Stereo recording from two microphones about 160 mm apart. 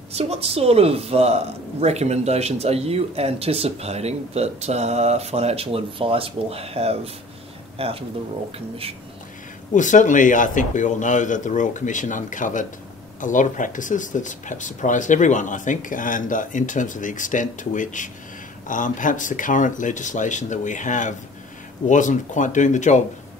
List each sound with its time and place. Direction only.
0.1 s speech: 40° right (ahead or behind)
9.8 s speech: 50° left (ahead or behind)